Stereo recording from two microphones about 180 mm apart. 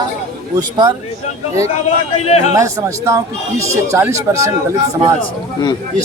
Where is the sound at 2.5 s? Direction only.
15° right (ahead or behind).